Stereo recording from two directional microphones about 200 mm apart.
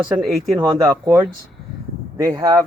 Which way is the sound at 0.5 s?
20° right (ahead or behind).